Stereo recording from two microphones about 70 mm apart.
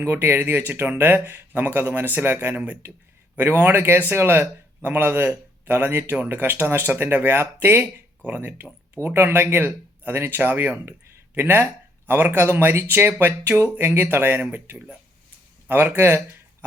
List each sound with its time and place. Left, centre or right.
0.0 s a man's voice: right